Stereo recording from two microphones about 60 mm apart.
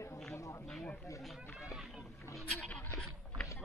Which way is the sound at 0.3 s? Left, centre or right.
Left.